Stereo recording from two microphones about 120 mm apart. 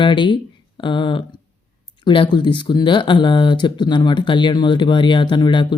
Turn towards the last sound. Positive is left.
turn(degrees=40)  # may be behind; listen again after turning